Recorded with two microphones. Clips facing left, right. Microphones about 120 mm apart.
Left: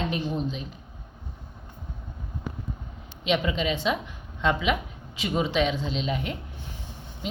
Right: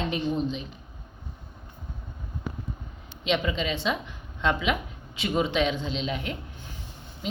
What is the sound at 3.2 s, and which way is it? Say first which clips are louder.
A woman's voice: left 1 dB; 5° left (ahead or behind).